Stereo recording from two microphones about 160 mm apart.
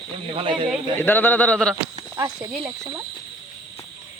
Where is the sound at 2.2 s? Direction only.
25° right (ahead or behind).